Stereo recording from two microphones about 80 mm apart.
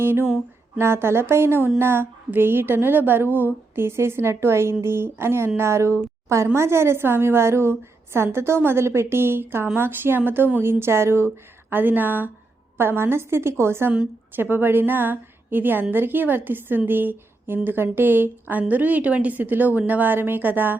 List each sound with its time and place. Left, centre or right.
0.0 s a woman's voice: right